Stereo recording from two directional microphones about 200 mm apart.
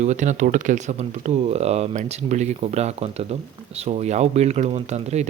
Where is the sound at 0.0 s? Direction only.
35° right (ahead or behind).